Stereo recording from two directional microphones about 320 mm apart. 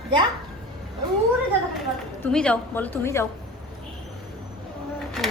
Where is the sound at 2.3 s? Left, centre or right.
Centre.